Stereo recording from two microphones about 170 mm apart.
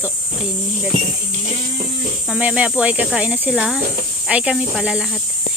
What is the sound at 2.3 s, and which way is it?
Speech, 5° right (ahead or behind).